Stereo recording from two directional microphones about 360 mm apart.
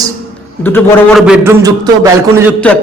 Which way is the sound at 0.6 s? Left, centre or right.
Centre.